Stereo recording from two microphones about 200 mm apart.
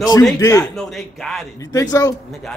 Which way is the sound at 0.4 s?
15° left (ahead or behind).